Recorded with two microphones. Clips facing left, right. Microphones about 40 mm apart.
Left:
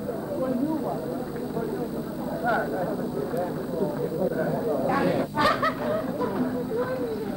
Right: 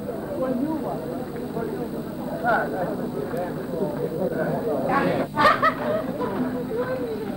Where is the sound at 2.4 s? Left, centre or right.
Right.